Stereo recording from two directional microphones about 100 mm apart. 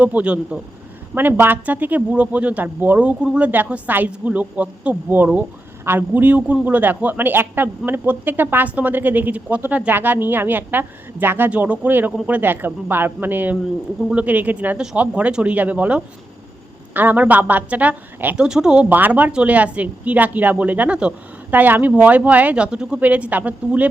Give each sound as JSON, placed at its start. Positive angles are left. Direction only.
{"t": 0.0, "sound": "a woman's voice", "side_deg": -15}